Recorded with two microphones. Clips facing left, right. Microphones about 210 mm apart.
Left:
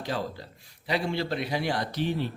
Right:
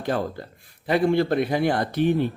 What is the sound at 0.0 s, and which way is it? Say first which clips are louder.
Speech: right 6 dB; 55° right (ahead or behind).